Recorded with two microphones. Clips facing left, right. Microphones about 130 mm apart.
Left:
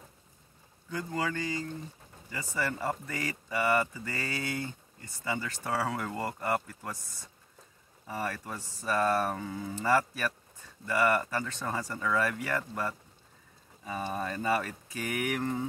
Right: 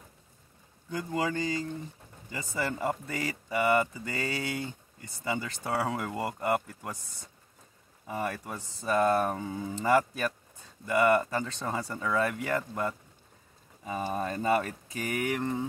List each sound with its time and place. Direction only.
0.8 s speech: 20° right (ahead or behind)
14.1 s speech: 25° right (ahead or behind)